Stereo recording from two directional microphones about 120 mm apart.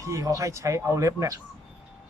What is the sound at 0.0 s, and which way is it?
Speech, 25° right (ahead or behind).